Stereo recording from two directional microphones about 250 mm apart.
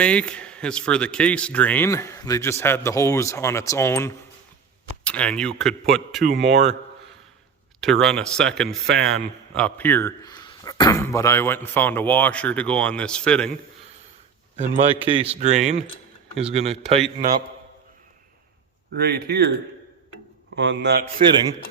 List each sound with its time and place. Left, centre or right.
0.0 s speech: centre
6.2 s speech: right
7.8 s speech: centre
8.9 s speech: right
9.5 s speech: centre
15.0 s speech: right
18.9 s speech: right
20.6 s speech: right